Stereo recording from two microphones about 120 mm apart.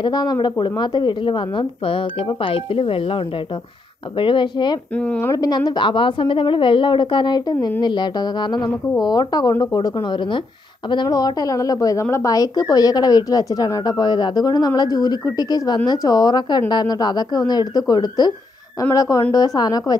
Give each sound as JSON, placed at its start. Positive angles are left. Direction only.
{"t": 0.0, "sound": "a woman's voice", "side_deg": 35}
{"t": 4.9, "sound": "speech", "side_deg": 10}
{"t": 5.3, "sound": "a woman's voice", "side_deg": 30}
{"t": 5.7, "sound": "a woman's voice", "side_deg": 40}